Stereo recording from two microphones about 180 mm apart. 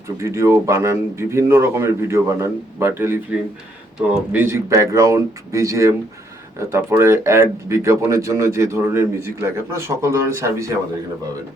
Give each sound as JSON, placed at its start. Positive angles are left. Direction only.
{"t": 0.2, "sound": "speech", "side_deg": -15}
{"t": 4.3, "sound": "speech", "side_deg": -10}